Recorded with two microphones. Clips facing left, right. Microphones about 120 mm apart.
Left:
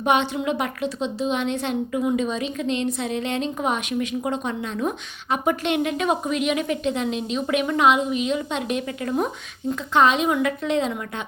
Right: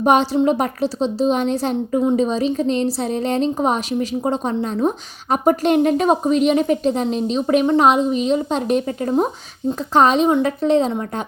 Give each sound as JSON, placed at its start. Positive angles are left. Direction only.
{"t": 0.0, "sound": "a woman's voice", "side_deg": -40}